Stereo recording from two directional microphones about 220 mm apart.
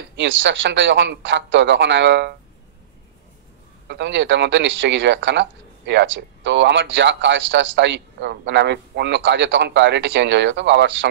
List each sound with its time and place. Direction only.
0.2 s a man's voice: 55° right (ahead or behind)
3.8 s a man's voice: 55° right (ahead or behind)